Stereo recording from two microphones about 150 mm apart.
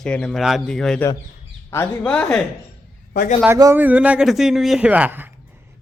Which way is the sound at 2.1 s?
5° left (ahead or behind).